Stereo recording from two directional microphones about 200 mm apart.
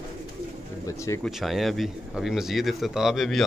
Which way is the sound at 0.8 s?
15° left (ahead or behind).